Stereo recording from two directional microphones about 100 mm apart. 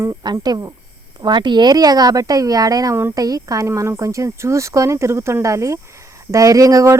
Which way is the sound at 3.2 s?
35° right (ahead or behind).